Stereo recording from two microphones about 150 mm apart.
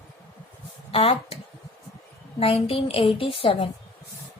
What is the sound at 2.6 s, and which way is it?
A woman's voice, 40° left (ahead or behind).